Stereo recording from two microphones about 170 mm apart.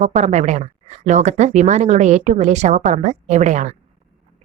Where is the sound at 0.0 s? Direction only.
40° right (ahead or behind).